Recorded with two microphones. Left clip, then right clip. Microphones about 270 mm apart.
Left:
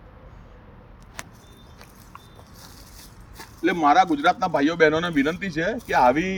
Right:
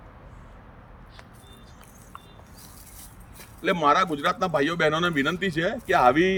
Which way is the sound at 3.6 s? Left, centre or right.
Centre.